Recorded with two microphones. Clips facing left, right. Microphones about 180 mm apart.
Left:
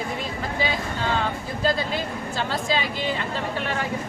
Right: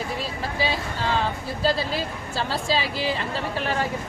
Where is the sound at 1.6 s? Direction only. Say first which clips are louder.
Even; 35° right (ahead or behind).